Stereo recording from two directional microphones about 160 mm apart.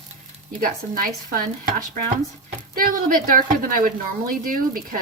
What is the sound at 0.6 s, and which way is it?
Speech, 60° right (ahead or behind).